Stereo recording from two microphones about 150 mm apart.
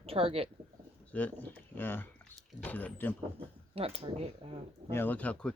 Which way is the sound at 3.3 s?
40° right (ahead or behind).